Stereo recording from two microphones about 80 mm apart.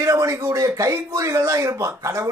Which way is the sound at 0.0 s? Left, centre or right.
Right.